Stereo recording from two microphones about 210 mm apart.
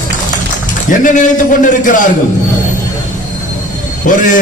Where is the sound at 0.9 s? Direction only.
40° left (ahead or behind).